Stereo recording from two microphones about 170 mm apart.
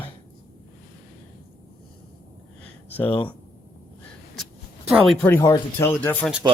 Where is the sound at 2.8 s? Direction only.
10° left (ahead or behind).